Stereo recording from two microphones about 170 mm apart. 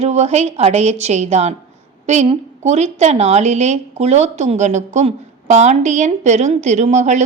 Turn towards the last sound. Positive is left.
turn(degrees=-45)  # may be behind; listen again after turning